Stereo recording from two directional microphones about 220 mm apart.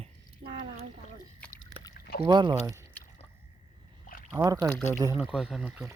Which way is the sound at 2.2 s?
20° right (ahead or behind).